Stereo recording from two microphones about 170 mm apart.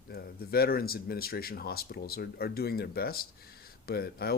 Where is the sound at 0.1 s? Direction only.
65° left (ahead or behind).